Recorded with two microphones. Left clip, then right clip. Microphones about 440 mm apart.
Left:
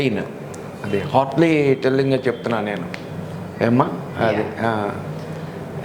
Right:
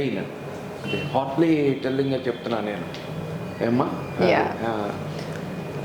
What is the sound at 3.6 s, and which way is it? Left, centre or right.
Speech, left.